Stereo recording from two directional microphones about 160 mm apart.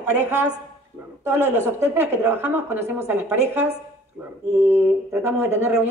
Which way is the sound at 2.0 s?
15° right (ahead or behind).